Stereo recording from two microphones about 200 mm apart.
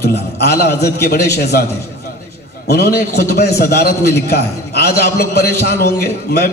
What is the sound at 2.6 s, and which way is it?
A man's voice, 50° left (ahead or behind).